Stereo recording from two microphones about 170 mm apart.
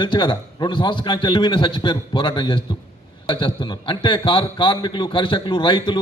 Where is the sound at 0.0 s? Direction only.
25° left (ahead or behind).